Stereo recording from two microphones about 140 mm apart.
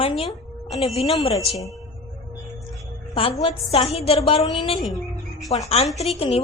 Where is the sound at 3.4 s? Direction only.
40° left (ahead or behind).